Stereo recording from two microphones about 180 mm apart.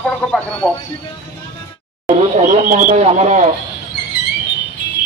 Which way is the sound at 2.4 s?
50° right (ahead or behind).